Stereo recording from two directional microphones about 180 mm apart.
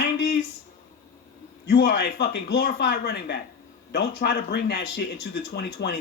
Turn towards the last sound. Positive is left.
turn(degrees=65)  # may be behind; listen again after turning